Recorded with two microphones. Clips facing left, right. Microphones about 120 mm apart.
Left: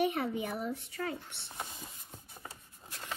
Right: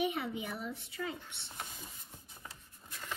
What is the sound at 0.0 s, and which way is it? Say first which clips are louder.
Speech: left 4 dB; 50° left (ahead or behind).